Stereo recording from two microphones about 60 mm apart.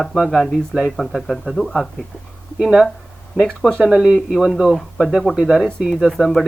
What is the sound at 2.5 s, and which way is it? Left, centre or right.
Speech, centre.